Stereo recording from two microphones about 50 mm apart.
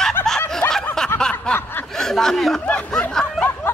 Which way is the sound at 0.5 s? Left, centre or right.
Centre.